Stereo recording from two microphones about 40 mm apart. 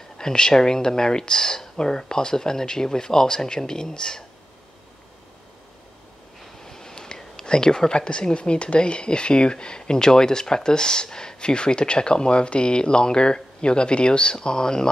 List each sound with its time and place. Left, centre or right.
0.2 s speech: centre
6.6 s speech: centre